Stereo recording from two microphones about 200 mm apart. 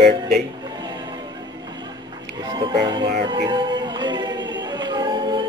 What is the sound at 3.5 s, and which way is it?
Music, 25° right (ahead or behind).